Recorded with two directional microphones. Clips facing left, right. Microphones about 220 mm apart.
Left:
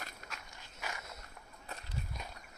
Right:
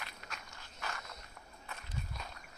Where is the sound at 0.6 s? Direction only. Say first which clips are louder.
Even; 15° left (ahead or behind).